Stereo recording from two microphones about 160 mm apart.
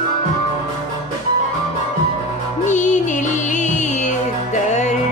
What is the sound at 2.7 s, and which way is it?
Music, 50° left (ahead or behind).